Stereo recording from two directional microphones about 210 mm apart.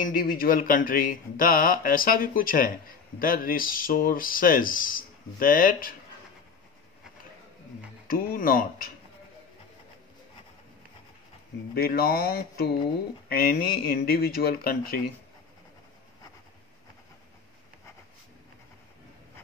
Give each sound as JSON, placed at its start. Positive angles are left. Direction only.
{"t": 0.0, "sound": "speech", "side_deg": 45}
{"t": 8.1, "sound": "speech", "side_deg": 45}
{"t": 11.7, "sound": "speech", "side_deg": 45}